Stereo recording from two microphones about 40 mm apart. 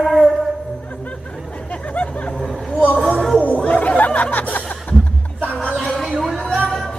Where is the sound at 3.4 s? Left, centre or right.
Left.